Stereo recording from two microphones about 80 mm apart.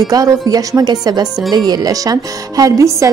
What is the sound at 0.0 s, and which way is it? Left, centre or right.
A woman's voice, right.